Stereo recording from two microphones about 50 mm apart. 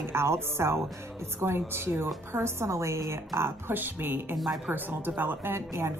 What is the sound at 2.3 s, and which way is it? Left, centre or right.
A woman's voice, right.